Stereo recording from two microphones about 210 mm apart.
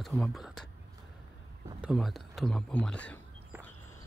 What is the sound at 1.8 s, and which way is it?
Speech, centre (ahead or behind).